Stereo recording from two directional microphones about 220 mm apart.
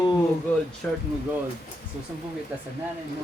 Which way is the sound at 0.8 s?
Centre (ahead or behind).